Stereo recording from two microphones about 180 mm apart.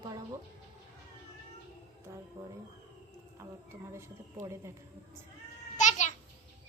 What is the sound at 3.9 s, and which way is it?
Speech, 15° right (ahead or behind).